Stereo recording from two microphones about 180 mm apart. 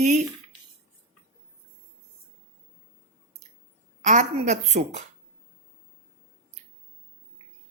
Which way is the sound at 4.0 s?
40° right (ahead or behind).